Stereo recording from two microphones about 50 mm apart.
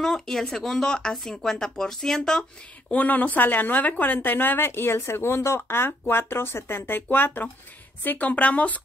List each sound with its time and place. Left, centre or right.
0.0 s speech: centre
2.9 s a woman's voice: left
4.6 s a woman's voice: left